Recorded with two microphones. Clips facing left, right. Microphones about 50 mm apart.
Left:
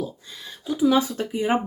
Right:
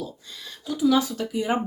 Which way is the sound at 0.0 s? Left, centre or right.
Centre.